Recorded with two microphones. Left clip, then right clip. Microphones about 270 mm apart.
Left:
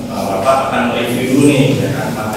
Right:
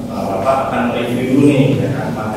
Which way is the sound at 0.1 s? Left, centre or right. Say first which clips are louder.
Left 2 dB; centre.